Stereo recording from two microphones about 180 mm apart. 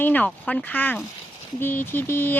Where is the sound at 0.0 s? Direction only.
10° left (ahead or behind).